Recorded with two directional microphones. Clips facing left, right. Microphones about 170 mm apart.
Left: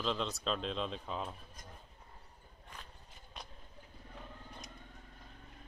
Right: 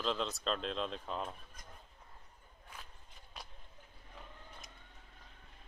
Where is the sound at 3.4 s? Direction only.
Centre (ahead or behind).